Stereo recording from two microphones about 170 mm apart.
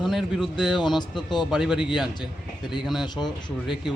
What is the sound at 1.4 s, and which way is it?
Speech, centre (ahead or behind).